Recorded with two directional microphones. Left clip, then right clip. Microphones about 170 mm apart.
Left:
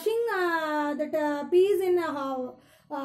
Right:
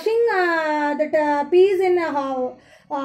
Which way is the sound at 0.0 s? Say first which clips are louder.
Right 8 dB; 30° left (ahead or behind).